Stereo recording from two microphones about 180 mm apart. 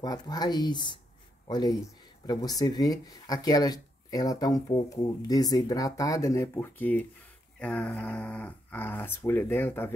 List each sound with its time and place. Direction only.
0.0 s speech: 20° left (ahead or behind)